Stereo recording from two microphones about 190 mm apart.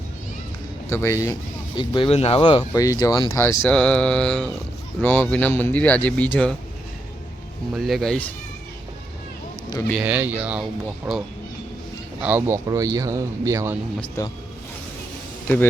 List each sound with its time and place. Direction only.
0.9 s speech: 15° left (ahead or behind)
7.7 s speech: centre (ahead or behind)
10.0 s speech: 10° right (ahead or behind)
12.2 s speech: 10° right (ahead or behind)
12.6 s speech: 20° right (ahead or behind)
14.2 s speech: 15° left (ahead or behind)